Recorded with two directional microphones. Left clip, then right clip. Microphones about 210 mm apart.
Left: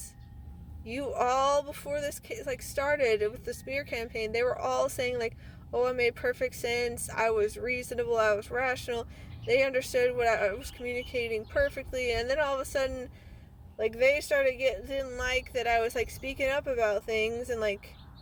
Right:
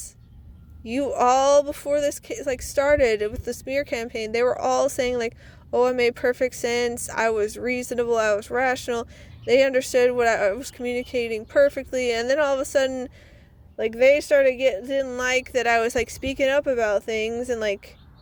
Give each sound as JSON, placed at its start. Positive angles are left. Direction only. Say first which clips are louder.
{"t": 0.9, "sound": "speech", "louder": "right 9 dB", "side_deg": -40}